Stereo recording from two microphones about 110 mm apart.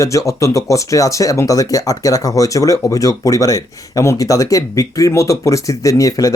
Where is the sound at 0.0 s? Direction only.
30° left (ahead or behind).